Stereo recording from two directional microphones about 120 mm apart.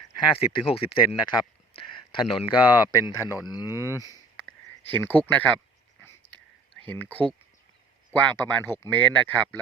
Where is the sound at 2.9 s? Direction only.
25° left (ahead or behind).